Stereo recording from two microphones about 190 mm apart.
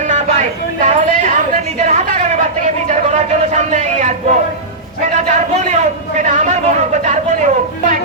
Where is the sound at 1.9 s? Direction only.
35° right (ahead or behind).